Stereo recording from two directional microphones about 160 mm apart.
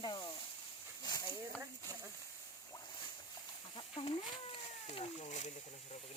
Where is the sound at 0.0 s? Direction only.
30° left (ahead or behind).